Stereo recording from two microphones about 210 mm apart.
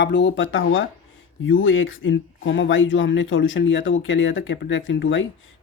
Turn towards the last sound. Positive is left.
turn(degrees=65)  # may be behind; listen again after turning